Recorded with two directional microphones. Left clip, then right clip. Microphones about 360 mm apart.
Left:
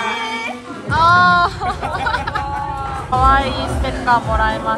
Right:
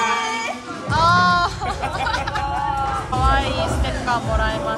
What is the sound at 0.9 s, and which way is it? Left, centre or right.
Music, centre.